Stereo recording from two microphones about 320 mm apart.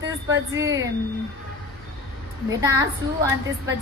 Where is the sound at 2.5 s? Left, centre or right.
Centre.